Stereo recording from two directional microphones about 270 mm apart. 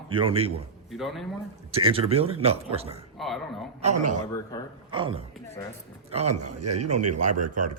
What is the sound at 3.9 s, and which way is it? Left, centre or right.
Speech, right.